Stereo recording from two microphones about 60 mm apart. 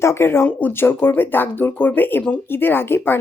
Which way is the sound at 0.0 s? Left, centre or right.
Left.